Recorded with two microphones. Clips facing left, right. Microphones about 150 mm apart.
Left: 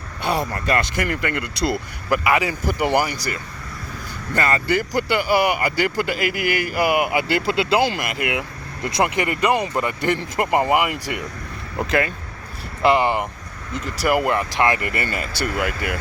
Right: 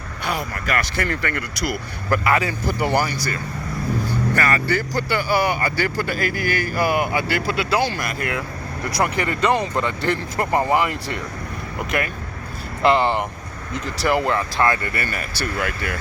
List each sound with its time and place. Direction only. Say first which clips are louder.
0.3 s speech: left 4 dB; 30° left (ahead or behind)
0.9 s speech: left 1 dB; 15° left (ahead or behind)
2.0 s speech: even; 10° left (ahead or behind)
11.8 s speech: left 4 dB; 30° left (ahead or behind)
12.8 s speech: even; 10° left (ahead or behind)